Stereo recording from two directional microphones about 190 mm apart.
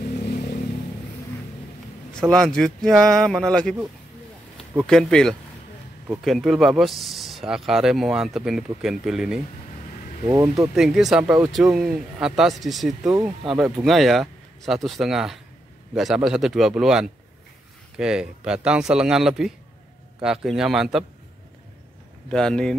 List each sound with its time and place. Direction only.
2.1 s speech: 5° left (ahead or behind)
10.2 s speech: 20° right (ahead or behind)
10.7 s speech: centre (ahead or behind)
22.3 s speech: 5° left (ahead or behind)